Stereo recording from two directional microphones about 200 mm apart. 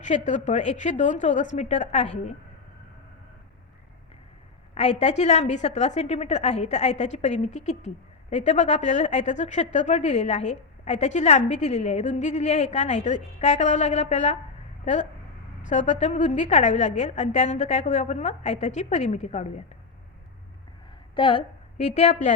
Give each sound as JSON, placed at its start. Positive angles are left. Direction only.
{"t": 0.0, "sound": "a woman's voice", "side_deg": 35}
{"t": 4.7, "sound": "a woman's voice", "side_deg": 35}
{"t": 15.6, "sound": "a woman's voice", "side_deg": 35}
{"t": 21.2, "sound": "a woman's voice", "side_deg": 25}